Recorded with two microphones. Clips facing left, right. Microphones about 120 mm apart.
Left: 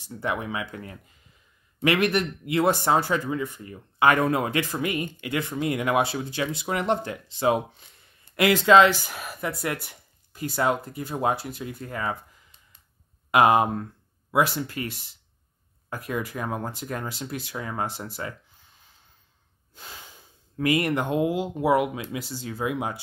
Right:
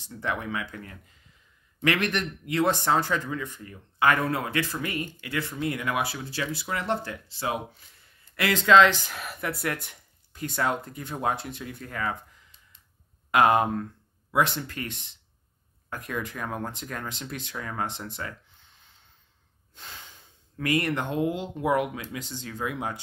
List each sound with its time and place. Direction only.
0.0 s speech: 10° left (ahead or behind)
13.3 s speech: 10° left (ahead or behind)
19.7 s snort: 5° left (ahead or behind)
20.5 s speech: 15° left (ahead or behind)